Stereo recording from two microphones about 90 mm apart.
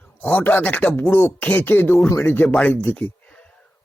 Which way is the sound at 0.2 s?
20° left (ahead or behind).